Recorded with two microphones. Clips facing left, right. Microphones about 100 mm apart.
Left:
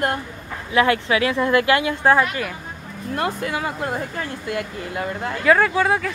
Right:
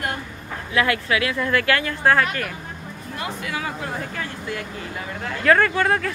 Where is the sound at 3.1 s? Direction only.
55° left (ahead or behind).